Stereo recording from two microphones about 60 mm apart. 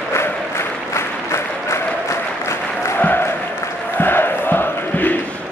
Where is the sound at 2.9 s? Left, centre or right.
Left.